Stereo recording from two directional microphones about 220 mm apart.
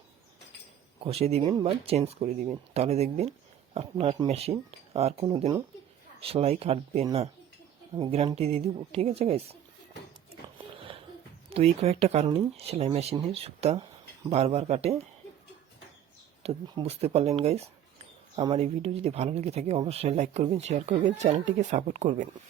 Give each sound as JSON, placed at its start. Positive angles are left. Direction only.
{"t": 1.0, "sound": "speech", "side_deg": -30}
{"t": 11.4, "sound": "speech", "side_deg": -25}
{"t": 16.4, "sound": "speech", "side_deg": -25}